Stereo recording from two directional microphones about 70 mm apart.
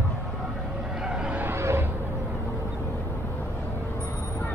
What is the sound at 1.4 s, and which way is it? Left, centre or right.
Vehicle, right.